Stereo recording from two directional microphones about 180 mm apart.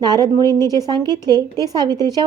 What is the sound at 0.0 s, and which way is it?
A woman's voice, 20° right (ahead or behind).